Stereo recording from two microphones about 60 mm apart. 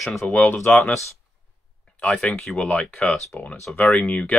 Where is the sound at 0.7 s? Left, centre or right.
Left.